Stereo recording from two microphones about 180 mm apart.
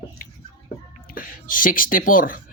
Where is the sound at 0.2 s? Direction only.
50° left (ahead or behind).